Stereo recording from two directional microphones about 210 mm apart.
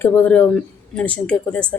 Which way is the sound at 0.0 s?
5° left (ahead or behind).